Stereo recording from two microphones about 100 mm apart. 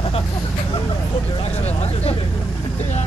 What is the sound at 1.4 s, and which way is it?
Speech, 90° left.